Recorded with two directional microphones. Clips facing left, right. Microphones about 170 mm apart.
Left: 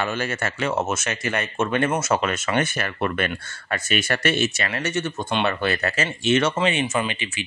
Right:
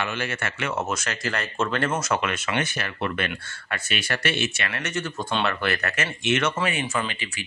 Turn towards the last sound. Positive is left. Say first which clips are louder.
# left 3 dB
turn(degrees=20)  # may be behind; listen again after turning